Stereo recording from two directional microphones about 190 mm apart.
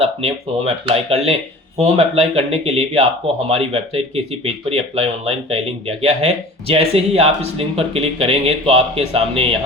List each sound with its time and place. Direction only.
0.0 s speech: 30° right (ahead or behind)